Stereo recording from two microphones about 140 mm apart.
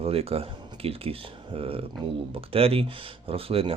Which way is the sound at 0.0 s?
45° right (ahead or behind).